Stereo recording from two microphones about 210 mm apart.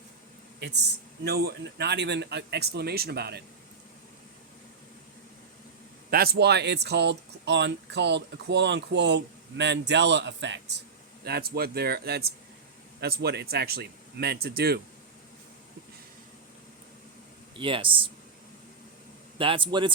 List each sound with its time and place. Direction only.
1.2 s a man's voice: 50° right (ahead or behind)
6.1 s a man's voice: 50° right (ahead or behind)
17.6 s speech: 25° right (ahead or behind)
19.4 s speech: 25° right (ahead or behind)